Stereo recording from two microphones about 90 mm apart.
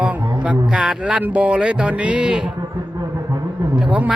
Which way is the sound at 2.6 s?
40° right (ahead or behind).